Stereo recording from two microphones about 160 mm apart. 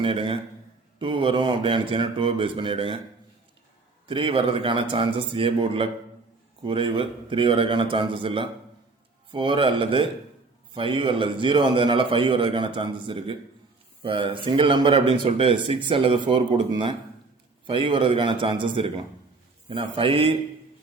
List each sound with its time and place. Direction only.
0.0 s speech: 35° right (ahead or behind)
4.0 s speech: 35° right (ahead or behind)